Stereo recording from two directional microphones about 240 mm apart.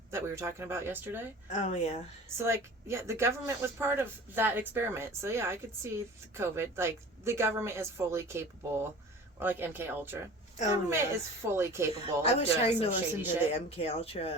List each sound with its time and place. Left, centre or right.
0.1 s speech: centre
1.5 s speech: left
2.4 s speech: centre
11.9 s speech: left